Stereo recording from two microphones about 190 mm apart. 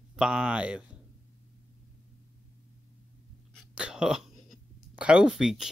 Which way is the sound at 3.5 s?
5° right (ahead or behind).